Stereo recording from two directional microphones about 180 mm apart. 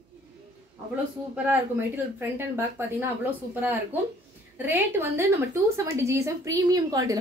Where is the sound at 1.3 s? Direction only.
10° right (ahead or behind).